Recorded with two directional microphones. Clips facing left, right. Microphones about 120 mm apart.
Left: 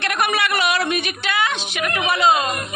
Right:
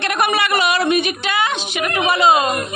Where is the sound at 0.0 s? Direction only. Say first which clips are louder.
Right 3 dB; centre (ahead or behind).